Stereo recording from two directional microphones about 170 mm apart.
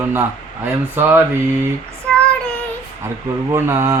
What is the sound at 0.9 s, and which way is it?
Speech, 15° right (ahead or behind).